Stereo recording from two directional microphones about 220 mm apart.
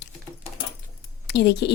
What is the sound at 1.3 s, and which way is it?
Speech, 50° left (ahead or behind).